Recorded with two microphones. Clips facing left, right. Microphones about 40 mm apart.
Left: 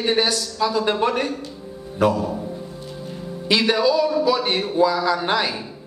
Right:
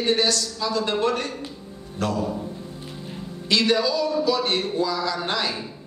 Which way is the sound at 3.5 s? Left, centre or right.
Centre.